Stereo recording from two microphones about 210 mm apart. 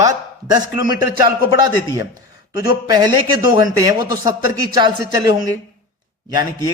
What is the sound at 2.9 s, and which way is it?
A man's voice, 20° right (ahead or behind).